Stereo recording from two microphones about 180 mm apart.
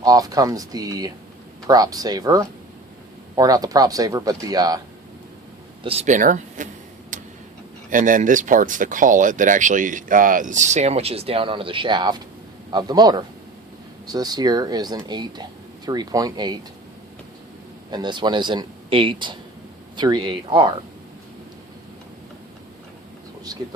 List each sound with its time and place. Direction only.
0.0 s a man's voice: 20° right (ahead or behind)
5.8 s speech: 35° right (ahead or behind)
7.1 s tick-tock: 45° right (ahead or behind)
7.9 s a man's voice: 45° right (ahead or behind); by 16.6 s 20° right (ahead or behind)
17.9 s a man's voice: 25° right (ahead or behind)